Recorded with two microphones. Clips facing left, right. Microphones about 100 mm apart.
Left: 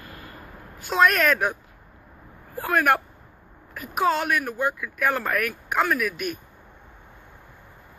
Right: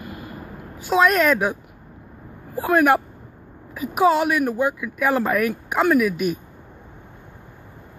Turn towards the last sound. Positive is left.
turn(degrees=-5)  # may be behind; listen again after turning